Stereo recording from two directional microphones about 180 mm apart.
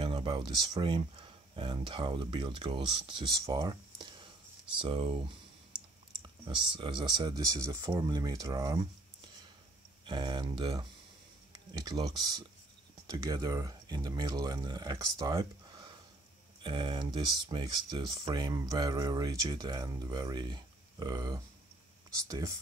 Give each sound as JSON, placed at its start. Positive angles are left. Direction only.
{"t": 0.0, "sound": "speech", "side_deg": -30}
{"t": 6.4, "sound": "speech", "side_deg": -25}
{"t": 10.0, "sound": "speech", "side_deg": -25}